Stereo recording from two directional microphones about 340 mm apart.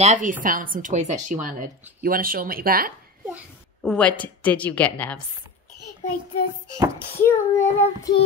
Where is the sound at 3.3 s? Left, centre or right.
Centre.